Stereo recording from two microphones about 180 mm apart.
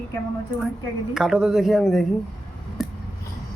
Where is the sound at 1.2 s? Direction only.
5° right (ahead or behind).